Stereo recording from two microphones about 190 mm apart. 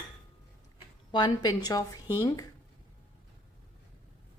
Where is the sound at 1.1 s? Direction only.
20° left (ahead or behind).